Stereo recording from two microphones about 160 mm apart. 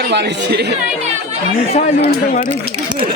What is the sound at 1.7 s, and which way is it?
Speech, 45° left (ahead or behind).